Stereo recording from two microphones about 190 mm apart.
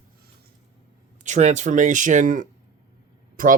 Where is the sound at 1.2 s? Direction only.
40° right (ahead or behind).